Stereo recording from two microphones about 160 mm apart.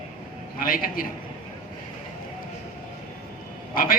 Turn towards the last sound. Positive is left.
turn(degrees=60)  # may be behind; listen again after turning